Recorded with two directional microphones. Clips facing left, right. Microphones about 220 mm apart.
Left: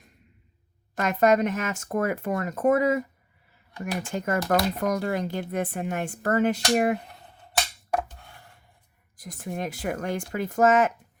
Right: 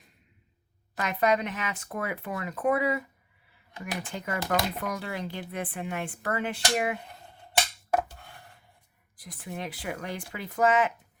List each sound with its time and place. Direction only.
0.9 s speech: 45° left (ahead or behind)
4.0 s speech: 45° left (ahead or behind)
7.9 s chopping: 5° right (ahead or behind)
9.1 s speech: 45° left (ahead or behind)